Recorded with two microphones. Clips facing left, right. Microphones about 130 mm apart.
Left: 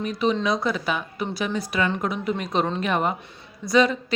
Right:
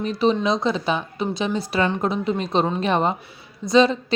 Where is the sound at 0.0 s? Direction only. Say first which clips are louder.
Right 3 dB; 30° right (ahead or behind).